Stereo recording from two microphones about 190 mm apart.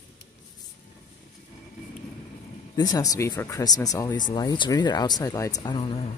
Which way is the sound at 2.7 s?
20° left (ahead or behind).